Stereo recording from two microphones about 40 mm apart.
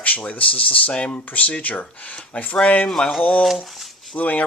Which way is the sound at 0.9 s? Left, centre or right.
Left.